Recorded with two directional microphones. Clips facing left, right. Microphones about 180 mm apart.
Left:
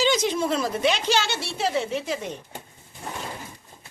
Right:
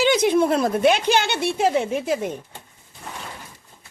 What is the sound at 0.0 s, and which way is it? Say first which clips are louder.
Speech: right 5 dB; 55° right (ahead or behind).